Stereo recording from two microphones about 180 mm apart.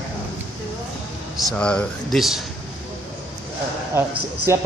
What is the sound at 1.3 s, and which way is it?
Speech, 5° left (ahead or behind).